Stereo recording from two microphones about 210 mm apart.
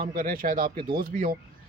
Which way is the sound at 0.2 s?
40° right (ahead or behind).